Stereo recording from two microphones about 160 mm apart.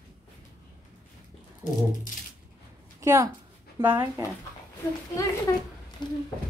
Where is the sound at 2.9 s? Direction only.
20° right (ahead or behind).